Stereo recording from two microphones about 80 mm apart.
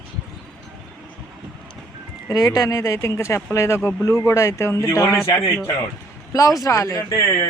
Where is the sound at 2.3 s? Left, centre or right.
Left.